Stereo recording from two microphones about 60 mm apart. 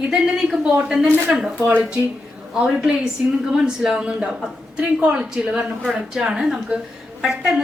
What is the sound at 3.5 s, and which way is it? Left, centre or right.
A woman's voice, centre.